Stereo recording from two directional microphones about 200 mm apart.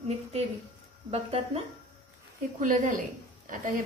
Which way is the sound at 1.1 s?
30° right (ahead or behind).